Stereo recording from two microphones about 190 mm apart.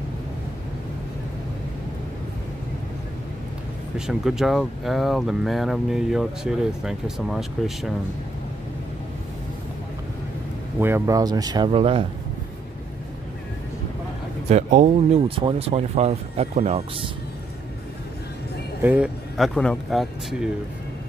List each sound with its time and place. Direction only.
4.0 s speech: centre (ahead or behind)
10.8 s speech: 10° right (ahead or behind); by 12.1 s 30° right (ahead or behind)
14.5 s speech: 40° right (ahead or behind)
18.8 s speech: 5° right (ahead or behind)